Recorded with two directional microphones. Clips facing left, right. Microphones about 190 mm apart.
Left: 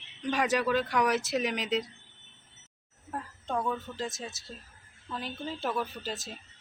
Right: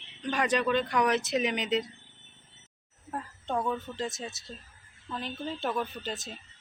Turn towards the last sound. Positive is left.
turn(degrees=0)  # may be behind; listen again after turning